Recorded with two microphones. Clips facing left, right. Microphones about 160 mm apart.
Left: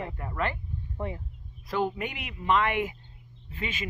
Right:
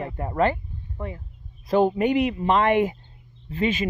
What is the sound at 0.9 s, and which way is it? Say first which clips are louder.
Speech: right 1 dB; 20° left (ahead or behind).